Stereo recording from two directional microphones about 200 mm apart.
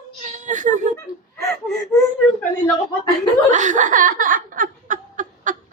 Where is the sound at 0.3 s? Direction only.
40° right (ahead or behind).